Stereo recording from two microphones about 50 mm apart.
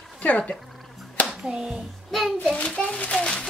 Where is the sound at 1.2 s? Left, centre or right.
Centre.